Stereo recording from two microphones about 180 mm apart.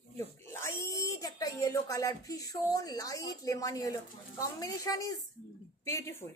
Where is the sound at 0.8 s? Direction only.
15° left (ahead or behind).